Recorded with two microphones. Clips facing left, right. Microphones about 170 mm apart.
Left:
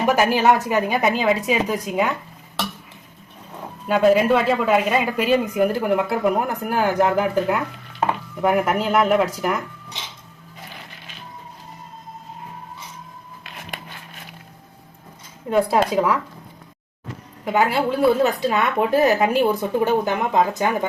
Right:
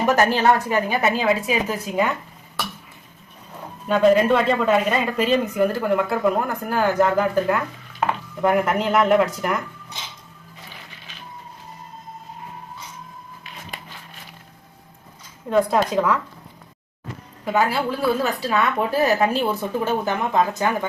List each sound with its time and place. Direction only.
0.0 s speech: 10° left (ahead or behind)
3.8 s speech: 5° left (ahead or behind)
15.4 s speech: 5° left (ahead or behind)
17.4 s a woman's voice: 20° left (ahead or behind)